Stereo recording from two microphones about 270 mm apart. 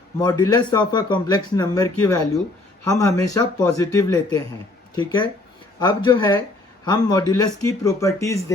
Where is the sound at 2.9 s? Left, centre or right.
Centre.